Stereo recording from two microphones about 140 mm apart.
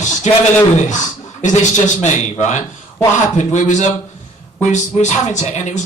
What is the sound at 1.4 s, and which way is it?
A man's voice, 60° left (ahead or behind).